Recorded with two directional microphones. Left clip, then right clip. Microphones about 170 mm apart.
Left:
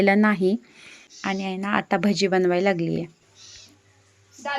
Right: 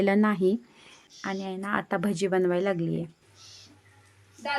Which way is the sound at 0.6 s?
5° right (ahead or behind).